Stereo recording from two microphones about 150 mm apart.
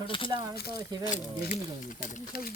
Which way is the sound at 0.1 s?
35° left (ahead or behind).